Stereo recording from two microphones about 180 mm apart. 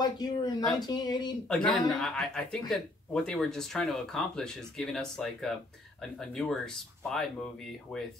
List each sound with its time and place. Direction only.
0.0 s speech: 25° left (ahead or behind)
1.5 s speech: 5° left (ahead or behind)